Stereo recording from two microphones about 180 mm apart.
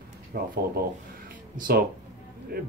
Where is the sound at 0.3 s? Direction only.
55° right (ahead or behind).